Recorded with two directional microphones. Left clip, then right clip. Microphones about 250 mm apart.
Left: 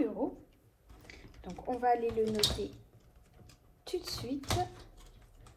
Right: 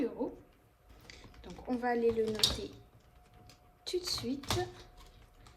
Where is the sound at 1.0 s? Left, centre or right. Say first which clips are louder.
Even; centre.